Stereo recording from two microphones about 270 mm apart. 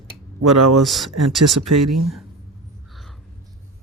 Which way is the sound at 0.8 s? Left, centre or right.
Centre.